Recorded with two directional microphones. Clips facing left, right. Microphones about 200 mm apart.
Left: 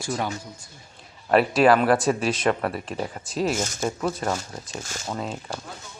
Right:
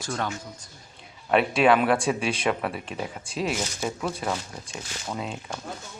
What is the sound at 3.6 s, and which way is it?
Speech, 45° left (ahead or behind).